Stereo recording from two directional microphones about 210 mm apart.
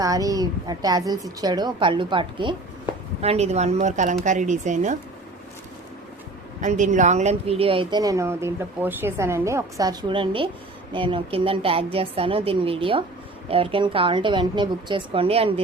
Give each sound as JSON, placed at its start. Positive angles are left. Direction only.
{"t": 0.0, "sound": "a woman's voice", "side_deg": -15}
{"t": 6.6, "sound": "speech", "side_deg": -35}